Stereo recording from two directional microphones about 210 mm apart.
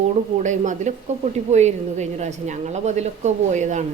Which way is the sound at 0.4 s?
35° right (ahead or behind).